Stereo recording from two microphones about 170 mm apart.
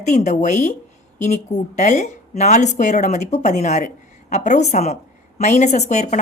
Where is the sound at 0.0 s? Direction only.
45° left (ahead or behind).